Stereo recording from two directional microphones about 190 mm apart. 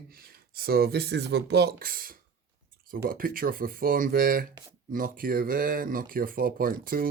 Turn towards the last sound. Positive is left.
turn(degrees=-50)  # may be behind; listen again after turning